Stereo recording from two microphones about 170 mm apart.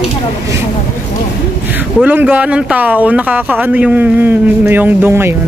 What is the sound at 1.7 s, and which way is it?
Speech, 10° right (ahead or behind).